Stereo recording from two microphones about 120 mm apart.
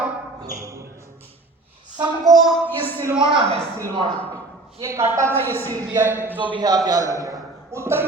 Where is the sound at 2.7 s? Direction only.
15° left (ahead or behind).